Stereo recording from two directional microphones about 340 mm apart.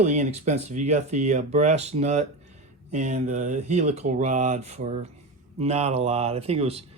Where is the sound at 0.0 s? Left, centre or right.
Right.